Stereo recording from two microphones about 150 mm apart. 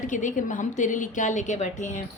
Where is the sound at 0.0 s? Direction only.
55° left (ahead or behind).